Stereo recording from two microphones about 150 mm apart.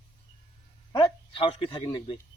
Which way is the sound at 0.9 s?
30° left (ahead or behind).